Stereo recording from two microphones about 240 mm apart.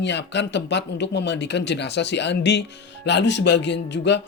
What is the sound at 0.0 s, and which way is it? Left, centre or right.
Speech, left.